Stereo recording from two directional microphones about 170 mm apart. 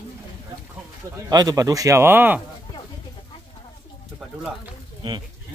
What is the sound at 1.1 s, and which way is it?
Speech, 20° right (ahead or behind).